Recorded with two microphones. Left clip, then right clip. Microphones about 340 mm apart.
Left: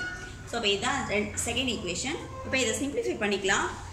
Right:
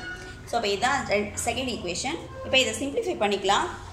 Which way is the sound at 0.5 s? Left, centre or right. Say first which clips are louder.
Right 3 dB; centre.